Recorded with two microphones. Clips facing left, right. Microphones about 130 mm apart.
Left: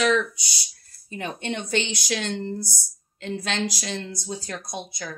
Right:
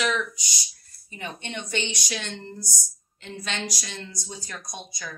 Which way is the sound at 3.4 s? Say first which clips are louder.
Left 3 dB; 75° left (ahead or behind).